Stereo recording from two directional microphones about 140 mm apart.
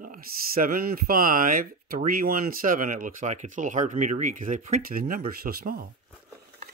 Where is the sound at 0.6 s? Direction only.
90° right.